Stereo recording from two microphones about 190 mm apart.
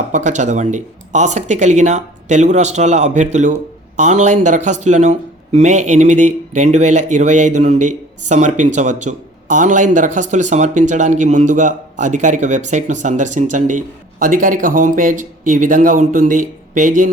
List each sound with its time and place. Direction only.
0.1 s speech: 40° right (ahead or behind)